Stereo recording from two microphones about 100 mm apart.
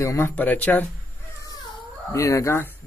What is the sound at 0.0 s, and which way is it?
Speech, 30° left (ahead or behind).